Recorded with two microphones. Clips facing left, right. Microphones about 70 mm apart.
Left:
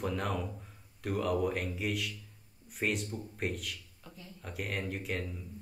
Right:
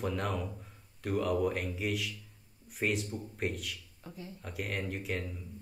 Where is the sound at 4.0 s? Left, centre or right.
Right.